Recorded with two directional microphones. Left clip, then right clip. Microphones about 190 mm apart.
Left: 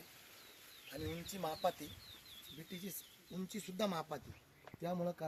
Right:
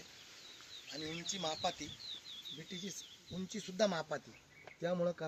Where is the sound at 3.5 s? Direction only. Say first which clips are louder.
Right 5 dB; 20° left (ahead or behind).